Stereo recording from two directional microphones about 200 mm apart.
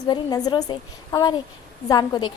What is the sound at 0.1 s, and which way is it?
A woman's voice, 20° left (ahead or behind).